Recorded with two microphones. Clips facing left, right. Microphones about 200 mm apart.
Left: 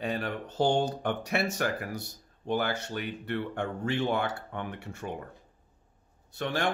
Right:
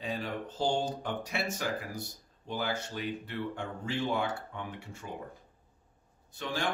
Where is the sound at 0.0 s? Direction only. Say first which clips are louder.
Left 3 dB; 65° left (ahead or behind).